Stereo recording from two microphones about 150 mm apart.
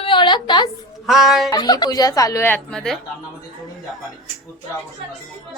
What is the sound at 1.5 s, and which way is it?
Speech, 25° left (ahead or behind).